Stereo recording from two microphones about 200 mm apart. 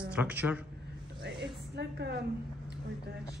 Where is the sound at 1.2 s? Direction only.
60° right (ahead or behind).